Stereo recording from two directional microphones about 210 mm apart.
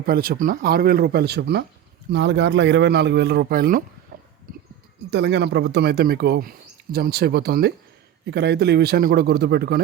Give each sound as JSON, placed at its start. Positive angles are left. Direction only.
{"t": 0.0, "sound": "a man's voice", "side_deg": -45}
{"t": 4.5, "sound": "a sound", "side_deg": -40}
{"t": 5.1, "sound": "speech", "side_deg": -55}